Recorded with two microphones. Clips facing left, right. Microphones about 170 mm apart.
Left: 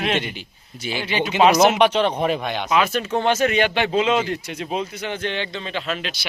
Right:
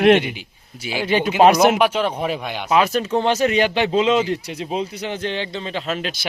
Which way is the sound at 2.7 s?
35° right (ahead or behind).